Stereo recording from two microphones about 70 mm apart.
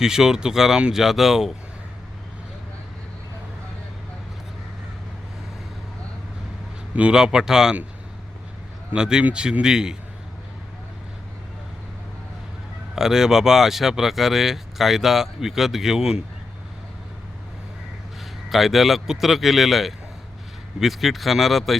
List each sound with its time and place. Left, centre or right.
0.0 s speech: centre
6.9 s speech: centre
8.9 s speech: centre
13.0 s speech: centre
18.5 s speech: centre